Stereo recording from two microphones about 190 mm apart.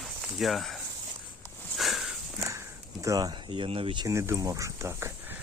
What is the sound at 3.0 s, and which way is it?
Speech, 20° right (ahead or behind).